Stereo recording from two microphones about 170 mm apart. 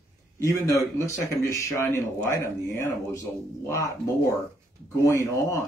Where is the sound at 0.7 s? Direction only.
20° left (ahead or behind).